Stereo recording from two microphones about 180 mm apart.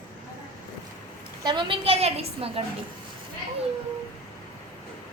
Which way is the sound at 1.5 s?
25° right (ahead or behind).